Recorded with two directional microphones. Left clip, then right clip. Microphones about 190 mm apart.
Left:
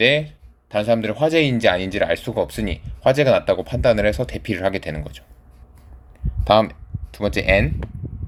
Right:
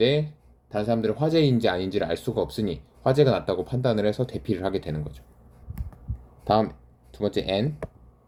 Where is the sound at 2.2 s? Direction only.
45° left (ahead or behind).